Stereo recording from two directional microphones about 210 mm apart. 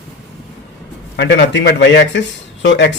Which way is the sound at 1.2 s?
55° left (ahead or behind).